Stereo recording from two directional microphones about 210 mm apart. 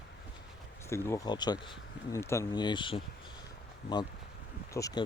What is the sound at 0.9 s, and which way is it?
Speech, 15° left (ahead or behind).